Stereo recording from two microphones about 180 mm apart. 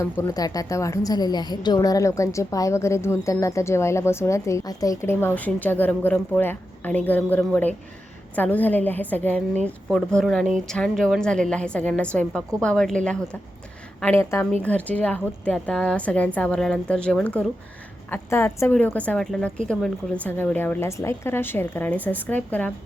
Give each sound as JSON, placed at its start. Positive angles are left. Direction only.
{"t": 0.0, "sound": "a woman's voice", "side_deg": 20}
{"t": 14.0, "sound": "a woman's voice", "side_deg": 15}